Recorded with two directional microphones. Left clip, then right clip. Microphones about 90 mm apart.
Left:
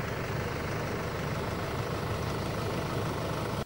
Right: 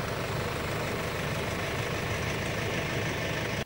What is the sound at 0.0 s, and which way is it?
Vehicle, 30° right (ahead or behind).